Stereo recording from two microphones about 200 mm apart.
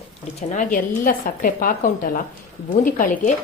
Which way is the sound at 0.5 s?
40° left (ahead or behind).